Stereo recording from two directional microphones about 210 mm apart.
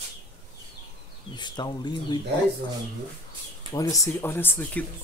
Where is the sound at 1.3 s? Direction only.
20° left (ahead or behind).